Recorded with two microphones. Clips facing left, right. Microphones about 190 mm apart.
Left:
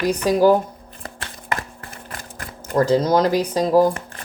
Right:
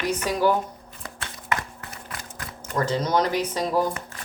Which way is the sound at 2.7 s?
35° left (ahead or behind).